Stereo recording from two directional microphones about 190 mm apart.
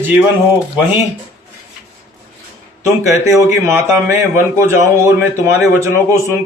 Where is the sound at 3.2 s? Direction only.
15° right (ahead or behind).